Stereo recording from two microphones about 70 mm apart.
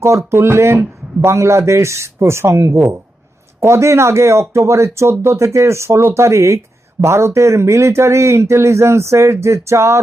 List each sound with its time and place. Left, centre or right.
0.0 s speech: right